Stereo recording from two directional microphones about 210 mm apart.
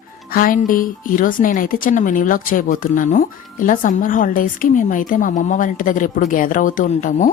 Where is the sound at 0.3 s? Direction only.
40° left (ahead or behind).